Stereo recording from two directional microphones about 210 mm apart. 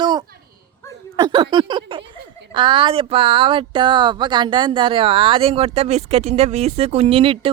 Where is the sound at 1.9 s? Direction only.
25° right (ahead or behind).